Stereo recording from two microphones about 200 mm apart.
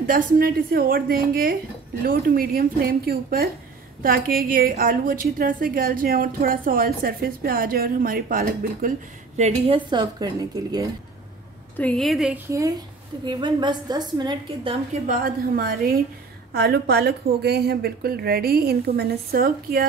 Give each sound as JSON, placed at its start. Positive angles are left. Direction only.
{"t": 0.0, "sound": "a woman's voice", "side_deg": -40}
{"t": 9.4, "sound": "a woman's voice", "side_deg": -30}
{"t": 11.7, "sound": "a woman's voice", "side_deg": 5}
{"t": 12.4, "sound": "a woman's voice", "side_deg": -15}
{"t": 15.0, "sound": "a woman's voice", "side_deg": -45}